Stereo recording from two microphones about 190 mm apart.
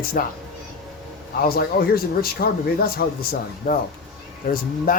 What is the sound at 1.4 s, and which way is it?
A man's voice, 50° left (ahead or behind).